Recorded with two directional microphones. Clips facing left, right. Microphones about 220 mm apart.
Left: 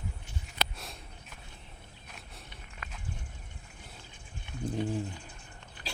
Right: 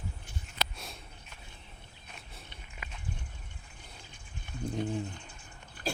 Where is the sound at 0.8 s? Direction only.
Centre (ahead or behind).